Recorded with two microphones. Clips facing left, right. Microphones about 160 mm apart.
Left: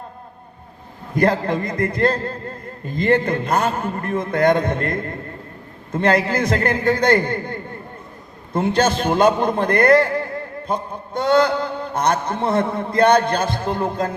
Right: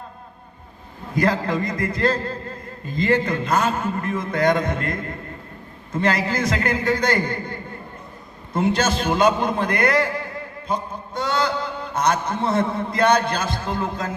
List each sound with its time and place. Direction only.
1.1 s a man's voice: 55° left (ahead or behind)